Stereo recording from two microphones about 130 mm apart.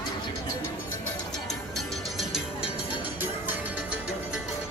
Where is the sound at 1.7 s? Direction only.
Centre (ahead or behind).